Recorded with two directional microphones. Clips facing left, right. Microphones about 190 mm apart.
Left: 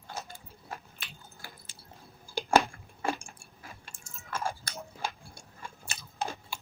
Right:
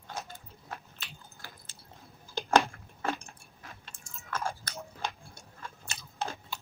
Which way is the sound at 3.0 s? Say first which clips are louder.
Left 1 dB; 10° left (ahead or behind).